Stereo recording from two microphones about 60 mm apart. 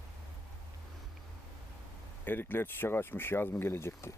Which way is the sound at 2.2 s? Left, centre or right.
Left.